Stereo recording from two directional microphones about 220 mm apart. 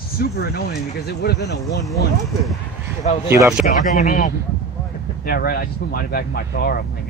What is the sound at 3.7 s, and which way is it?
Speech, 35° left (ahead or behind).